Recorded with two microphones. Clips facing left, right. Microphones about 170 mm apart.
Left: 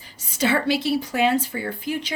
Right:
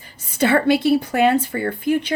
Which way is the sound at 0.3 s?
55° right (ahead or behind).